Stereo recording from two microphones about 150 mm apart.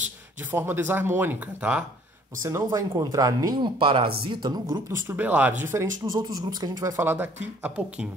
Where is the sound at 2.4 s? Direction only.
20° right (ahead or behind).